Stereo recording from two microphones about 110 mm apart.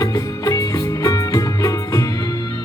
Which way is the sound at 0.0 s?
30° left (ahead or behind).